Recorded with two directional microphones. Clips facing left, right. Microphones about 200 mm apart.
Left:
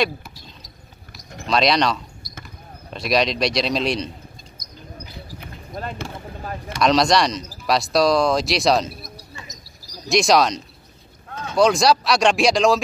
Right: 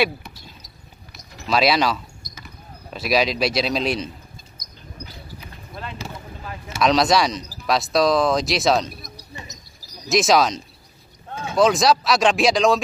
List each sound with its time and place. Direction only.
0.0 s a sound: centre (ahead or behind)
1.5 s speech: 5° right (ahead or behind)
5.7 s boat: 45° left (ahead or behind)
6.7 s speech: centre (ahead or behind)